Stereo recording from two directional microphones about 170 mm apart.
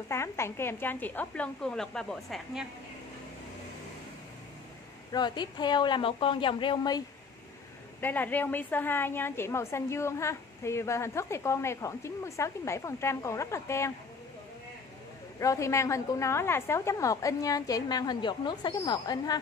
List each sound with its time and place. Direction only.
0.1 s a woman's voice: 15° left (ahead or behind)
5.1 s a woman's voice: 25° left (ahead or behind)
8.0 s a woman's voice: 10° left (ahead or behind)
15.3 s a woman's voice: 20° left (ahead or behind)